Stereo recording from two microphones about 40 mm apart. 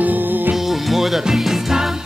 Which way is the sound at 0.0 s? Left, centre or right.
Right.